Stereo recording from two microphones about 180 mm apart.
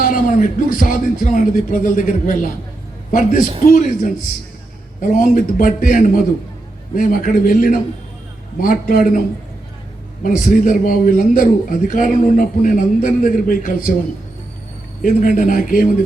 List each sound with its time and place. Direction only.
0.0 s a sound: 50° left (ahead or behind)
0.8 s a man's voice: 45° left (ahead or behind)
10.2 s a man's voice: 45° left (ahead or behind)
15.0 s a man's voice: 50° left (ahead or behind)